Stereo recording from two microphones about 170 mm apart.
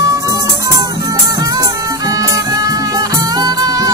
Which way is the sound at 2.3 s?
20° right (ahead or behind).